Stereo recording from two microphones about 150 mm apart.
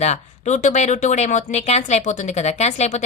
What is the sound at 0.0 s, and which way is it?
Speech, 50° left (ahead or behind).